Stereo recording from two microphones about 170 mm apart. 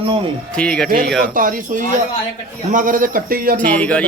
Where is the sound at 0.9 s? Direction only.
55° right (ahead or behind).